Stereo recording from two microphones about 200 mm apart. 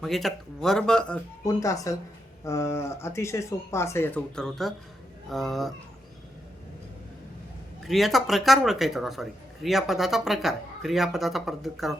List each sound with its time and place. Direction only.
0.0 s speech: centre (ahead or behind)
1.5 s speech: 15° left (ahead or behind); by 5.7 s centre (ahead or behind)
7.9 s speech: centre (ahead or behind)